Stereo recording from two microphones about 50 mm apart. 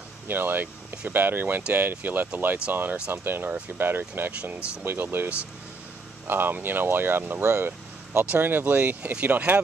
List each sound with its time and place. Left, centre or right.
0.3 s speech: right
8.4 s speech: right